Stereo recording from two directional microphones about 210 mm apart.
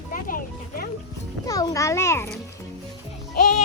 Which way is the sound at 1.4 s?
15° left (ahead or behind).